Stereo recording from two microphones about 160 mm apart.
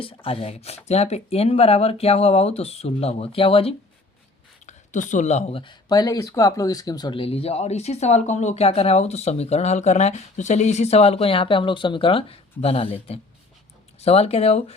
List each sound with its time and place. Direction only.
0.0 s speech: 35° left (ahead or behind)
4.6 s speech: 50° left (ahead or behind)